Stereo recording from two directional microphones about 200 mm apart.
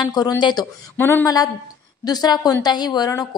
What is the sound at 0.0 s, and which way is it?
Speech, 20° left (ahead or behind).